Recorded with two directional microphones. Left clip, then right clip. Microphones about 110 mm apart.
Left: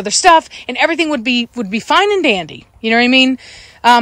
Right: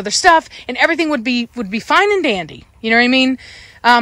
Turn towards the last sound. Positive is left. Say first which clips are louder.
# left 2 dB
turn(degrees=30)  # may be behind; listen again after turning